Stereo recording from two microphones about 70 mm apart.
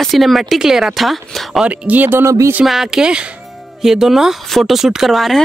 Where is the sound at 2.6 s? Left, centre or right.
Centre.